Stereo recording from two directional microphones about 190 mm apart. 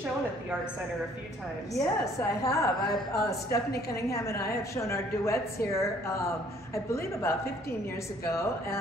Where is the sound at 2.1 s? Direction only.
15° left (ahead or behind).